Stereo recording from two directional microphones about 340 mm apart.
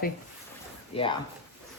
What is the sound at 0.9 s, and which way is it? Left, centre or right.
Speech, centre.